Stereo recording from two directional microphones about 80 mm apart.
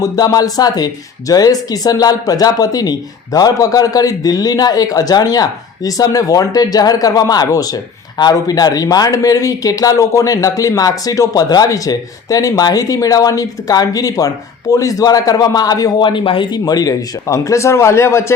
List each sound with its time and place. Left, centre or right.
0.3 s a man's voice: left
16.0 s a man's voice: left